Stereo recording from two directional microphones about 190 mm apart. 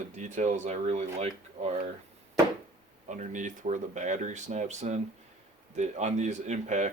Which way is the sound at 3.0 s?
40° right (ahead or behind).